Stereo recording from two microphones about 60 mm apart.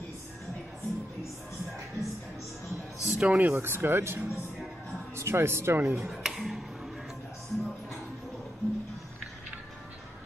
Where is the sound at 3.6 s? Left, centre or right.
Right.